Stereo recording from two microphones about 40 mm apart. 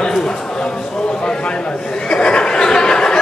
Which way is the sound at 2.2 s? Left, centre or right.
Left.